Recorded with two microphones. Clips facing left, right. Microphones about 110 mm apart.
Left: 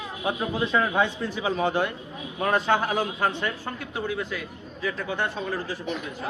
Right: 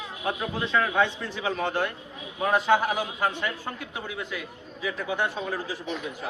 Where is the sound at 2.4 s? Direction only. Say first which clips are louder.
Right 1 dB; 10° right (ahead or behind).